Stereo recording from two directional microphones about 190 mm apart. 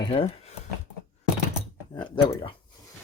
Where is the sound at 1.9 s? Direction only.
25° left (ahead or behind).